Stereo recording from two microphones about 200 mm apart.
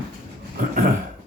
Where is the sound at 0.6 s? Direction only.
45° right (ahead or behind).